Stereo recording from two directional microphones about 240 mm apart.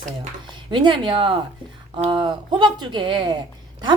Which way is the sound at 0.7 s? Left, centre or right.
Centre.